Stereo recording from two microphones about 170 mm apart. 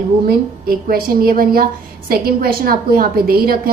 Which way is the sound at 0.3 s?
60° right (ahead or behind).